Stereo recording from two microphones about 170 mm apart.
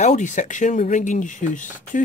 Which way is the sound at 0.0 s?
45° left (ahead or behind).